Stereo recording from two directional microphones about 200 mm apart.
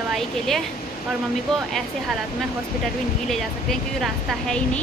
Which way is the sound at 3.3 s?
Centre (ahead or behind).